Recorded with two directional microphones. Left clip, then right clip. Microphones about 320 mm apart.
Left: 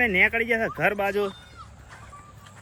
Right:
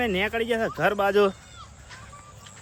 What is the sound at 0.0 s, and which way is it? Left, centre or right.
Speech, centre.